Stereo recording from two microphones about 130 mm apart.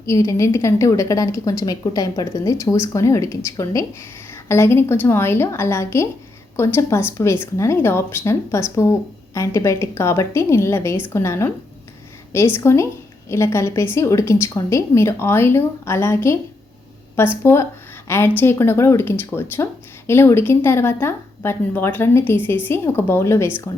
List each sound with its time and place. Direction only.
0.0 s speech: 20° left (ahead or behind)